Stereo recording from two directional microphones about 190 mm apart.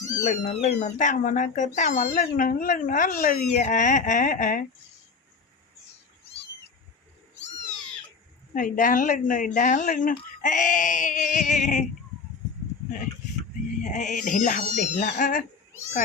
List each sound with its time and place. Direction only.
0.0 s speech: 40° left (ahead or behind)
8.5 s speech: 45° left (ahead or behind)
13.8 s speech: 40° left (ahead or behind)